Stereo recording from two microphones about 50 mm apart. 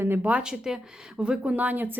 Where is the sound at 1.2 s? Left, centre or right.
Right.